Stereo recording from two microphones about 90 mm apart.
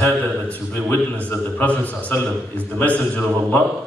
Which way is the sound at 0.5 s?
20° left (ahead or behind).